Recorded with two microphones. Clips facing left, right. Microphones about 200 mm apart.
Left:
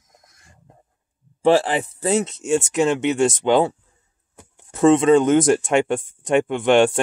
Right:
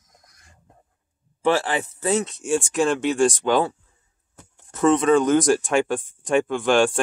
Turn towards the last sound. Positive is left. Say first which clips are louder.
# left 3 dB
turn(degrees=25)  # may be behind; listen again after turning